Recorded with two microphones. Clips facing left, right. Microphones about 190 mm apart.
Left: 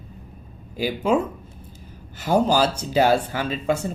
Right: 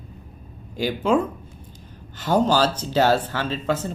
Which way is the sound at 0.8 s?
10° left (ahead or behind).